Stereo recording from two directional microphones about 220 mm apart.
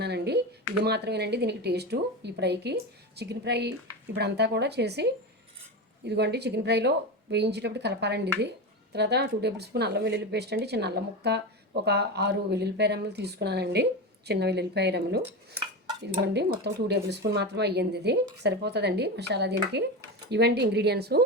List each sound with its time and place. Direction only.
0.0 s a sound: 50° right (ahead or behind)
0.9 s speech: 50° right (ahead or behind)
16.2 s speech: 50° right (ahead or behind)